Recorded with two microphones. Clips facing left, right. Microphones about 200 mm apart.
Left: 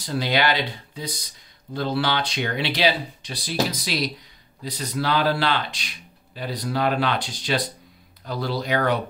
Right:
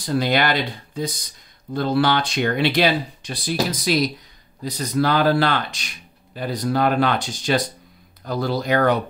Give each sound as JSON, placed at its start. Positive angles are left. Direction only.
{"t": 0.0, "sound": "speech", "side_deg": -50}